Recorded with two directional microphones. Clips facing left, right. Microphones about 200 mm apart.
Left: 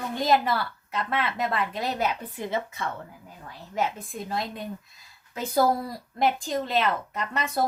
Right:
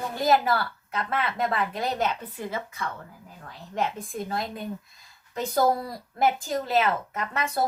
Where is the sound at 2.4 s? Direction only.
20° left (ahead or behind).